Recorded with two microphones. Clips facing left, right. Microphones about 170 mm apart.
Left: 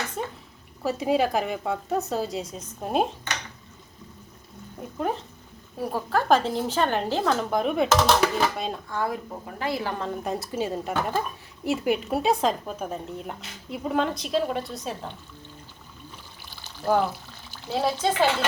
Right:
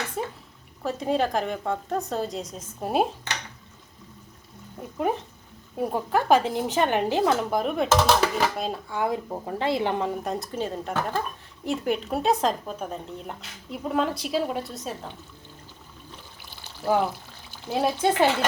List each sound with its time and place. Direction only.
0.2 s a sound: centre (ahead or behind)
0.8 s speech: 5° left (ahead or behind)
4.8 s speech: 10° right (ahead or behind)
7.5 s speech: centre (ahead or behind)
8.9 s speech: 15° right (ahead or behind)
9.1 s speech: 30° right (ahead or behind)
10.2 s speech: 5° left (ahead or behind)
17.7 s speech: 15° right (ahead or behind)